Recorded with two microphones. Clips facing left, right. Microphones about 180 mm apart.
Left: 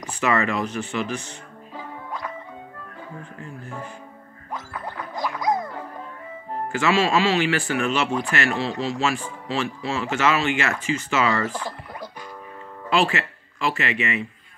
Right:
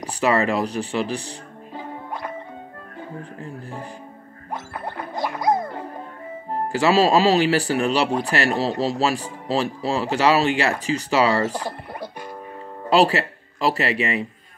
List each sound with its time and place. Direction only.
0.0 s speech: 35° right (ahead or behind)
3.2 s speech: 35° right (ahead or behind)
4.5 s music: 55° right (ahead or behind)
6.5 s speech: 35° right (ahead or behind)